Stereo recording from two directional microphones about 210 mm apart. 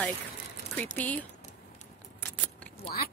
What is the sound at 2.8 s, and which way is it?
Chewing, 45° left (ahead or behind).